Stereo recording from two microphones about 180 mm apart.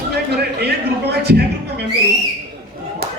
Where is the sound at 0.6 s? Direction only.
65° right (ahead or behind).